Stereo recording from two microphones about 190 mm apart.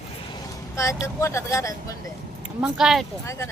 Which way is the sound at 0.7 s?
15° left (ahead or behind).